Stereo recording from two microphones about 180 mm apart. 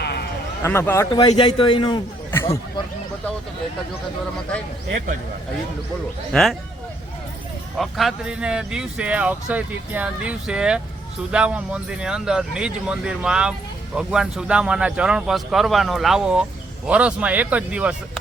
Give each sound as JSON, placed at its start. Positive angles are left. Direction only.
{"t": 0.0, "sound": "a sound", "side_deg": 65}
{"t": 0.6, "sound": "a man's voice", "side_deg": 15}
{"t": 1.1, "sound": "a man's voice", "side_deg": 30}
{"t": 2.3, "sound": "a sound", "side_deg": 15}
{"t": 6.3, "sound": "speech", "side_deg": 0}
{"t": 7.8, "sound": "speech", "side_deg": 0}